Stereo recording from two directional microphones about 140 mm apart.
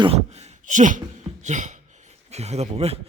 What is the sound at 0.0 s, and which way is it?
Speech, 45° right (ahead or behind).